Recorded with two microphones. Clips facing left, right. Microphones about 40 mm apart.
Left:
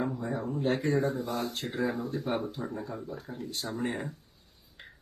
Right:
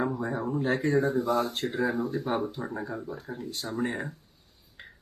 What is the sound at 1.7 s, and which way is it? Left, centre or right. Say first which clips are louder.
Speech: right 2 dB; centre.